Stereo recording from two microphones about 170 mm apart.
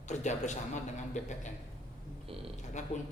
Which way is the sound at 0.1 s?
45° left (ahead or behind).